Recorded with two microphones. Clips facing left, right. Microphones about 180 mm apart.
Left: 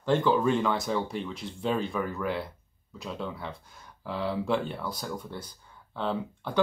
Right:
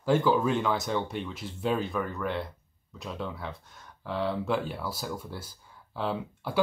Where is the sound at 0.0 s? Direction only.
5° right (ahead or behind).